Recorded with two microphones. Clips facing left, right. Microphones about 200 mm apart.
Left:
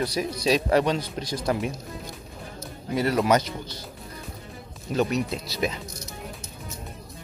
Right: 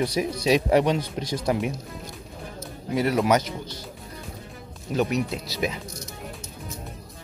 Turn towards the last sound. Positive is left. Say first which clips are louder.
# even
turn(degrees=-10)  # may be behind; listen again after turning